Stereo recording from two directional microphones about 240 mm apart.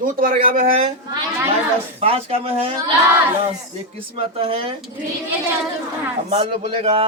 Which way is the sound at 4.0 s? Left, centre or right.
Right.